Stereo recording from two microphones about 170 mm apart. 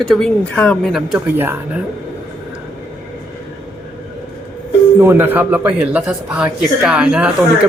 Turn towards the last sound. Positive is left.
turn(degrees=-5)  # may be behind; listen again after turning